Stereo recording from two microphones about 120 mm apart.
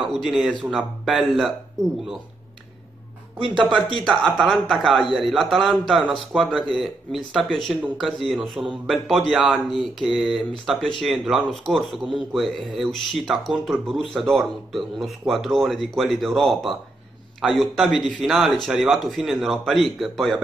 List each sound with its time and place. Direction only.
0.0 s a man's voice: centre (ahead or behind)
3.3 s speech: 45° right (ahead or behind)
4.1 s a man's voice: centre (ahead or behind)